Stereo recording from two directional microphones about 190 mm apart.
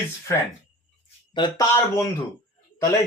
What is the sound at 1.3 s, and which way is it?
Speech, 20° left (ahead or behind).